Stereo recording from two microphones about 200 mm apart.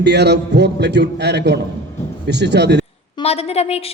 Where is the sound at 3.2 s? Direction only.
30° left (ahead or behind).